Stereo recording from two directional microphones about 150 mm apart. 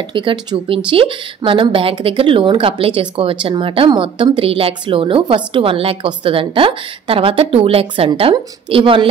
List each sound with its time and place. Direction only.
0.1 s speech: 35° right (ahead or behind)